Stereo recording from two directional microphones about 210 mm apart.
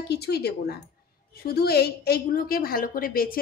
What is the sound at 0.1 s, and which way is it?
A woman's voice, 50° left (ahead or behind).